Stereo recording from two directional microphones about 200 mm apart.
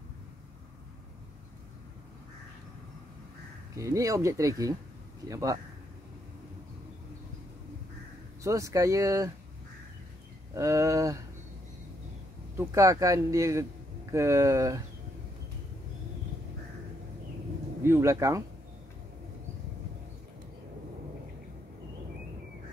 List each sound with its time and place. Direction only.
3.7 s speech: 15° right (ahead or behind)
8.5 s speech: 15° right (ahead or behind)
10.5 s speech: 15° right (ahead or behind)
12.5 s speech: 15° right (ahead or behind)
17.8 s speech: 15° right (ahead or behind)